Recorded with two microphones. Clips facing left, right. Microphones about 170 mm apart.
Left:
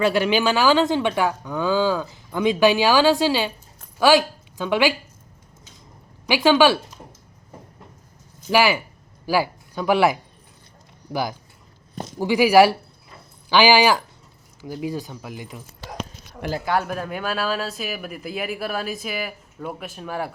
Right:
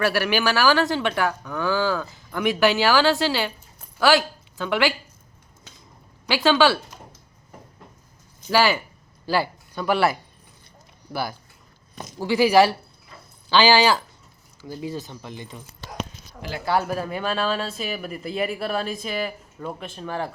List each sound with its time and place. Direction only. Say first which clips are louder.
0.0 s speech: left 3 dB; 20° left (ahead or behind)
6.2 s speech: left 2 dB; 15° left (ahead or behind)
8.4 s speech: left 1 dB; 10° left (ahead or behind)
16.6 s speech: right 2 dB; 5° right (ahead or behind)